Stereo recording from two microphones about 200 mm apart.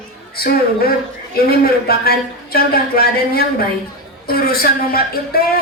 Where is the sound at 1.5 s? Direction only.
50° left (ahead or behind).